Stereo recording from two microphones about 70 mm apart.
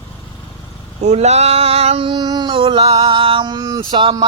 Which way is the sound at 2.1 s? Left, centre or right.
Right.